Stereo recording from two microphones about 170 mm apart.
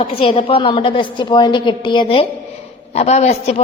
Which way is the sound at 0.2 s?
30° left (ahead or behind).